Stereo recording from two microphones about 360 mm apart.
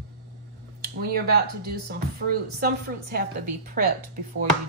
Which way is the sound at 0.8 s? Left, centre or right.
Right.